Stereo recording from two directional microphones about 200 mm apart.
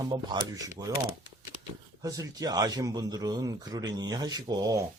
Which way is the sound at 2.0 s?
20° right (ahead or behind).